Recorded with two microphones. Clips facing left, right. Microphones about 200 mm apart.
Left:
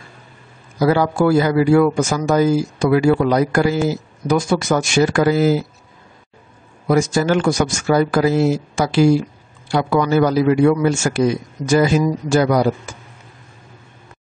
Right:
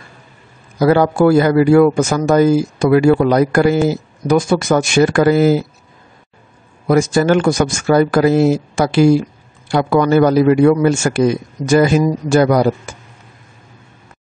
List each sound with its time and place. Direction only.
0.7 s a man's voice: 55° right (ahead or behind)
6.9 s a man's voice: 55° right (ahead or behind)